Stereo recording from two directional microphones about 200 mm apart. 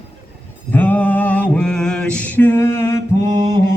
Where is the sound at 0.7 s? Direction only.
10° left (ahead or behind).